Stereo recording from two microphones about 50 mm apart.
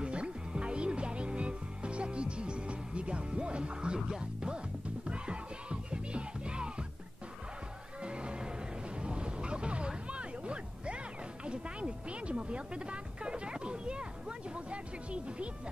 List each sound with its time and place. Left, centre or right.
0.0 s music: right
8.0 s music: centre
9.0 s a sound: centre
11.4 s speech: right